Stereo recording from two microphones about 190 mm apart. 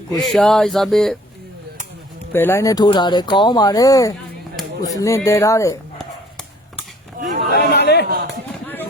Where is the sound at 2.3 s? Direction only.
10° left (ahead or behind).